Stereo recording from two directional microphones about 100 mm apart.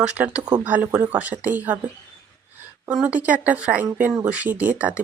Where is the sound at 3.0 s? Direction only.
15° right (ahead or behind).